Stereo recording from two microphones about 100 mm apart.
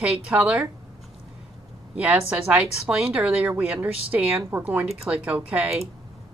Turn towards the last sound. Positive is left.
turn(degrees=-15)  # may be behind; listen again after turning